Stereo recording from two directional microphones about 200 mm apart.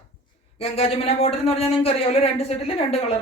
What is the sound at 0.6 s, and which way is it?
Speech, 30° left (ahead or behind).